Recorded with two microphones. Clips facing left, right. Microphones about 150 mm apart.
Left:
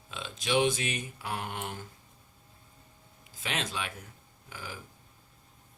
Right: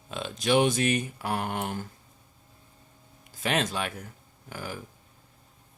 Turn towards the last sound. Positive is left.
turn(degrees=-50)  # may be behind; listen again after turning